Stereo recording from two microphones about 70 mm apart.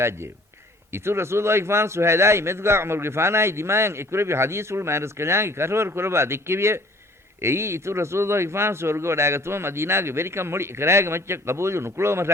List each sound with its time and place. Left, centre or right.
0.9 s a man's voice: right